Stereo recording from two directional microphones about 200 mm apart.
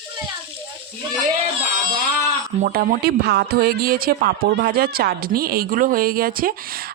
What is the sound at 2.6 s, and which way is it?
A woman's voice, 45° right (ahead or behind).